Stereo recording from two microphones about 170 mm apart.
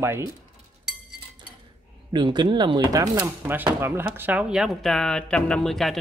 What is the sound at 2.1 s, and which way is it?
Speech, 25° right (ahead or behind).